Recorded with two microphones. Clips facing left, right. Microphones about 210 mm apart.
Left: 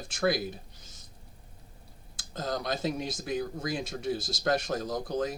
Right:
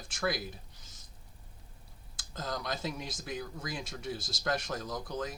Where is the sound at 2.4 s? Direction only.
25° left (ahead or behind).